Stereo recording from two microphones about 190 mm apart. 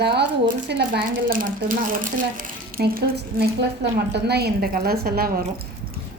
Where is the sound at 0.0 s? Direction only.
55° right (ahead or behind).